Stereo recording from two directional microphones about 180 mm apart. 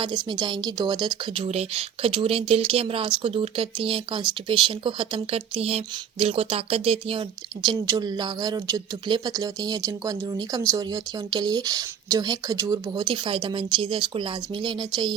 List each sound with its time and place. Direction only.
0.0 s speech: 25° right (ahead or behind)